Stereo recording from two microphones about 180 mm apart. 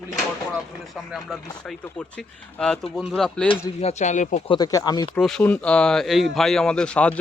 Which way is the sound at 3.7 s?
40° left (ahead or behind).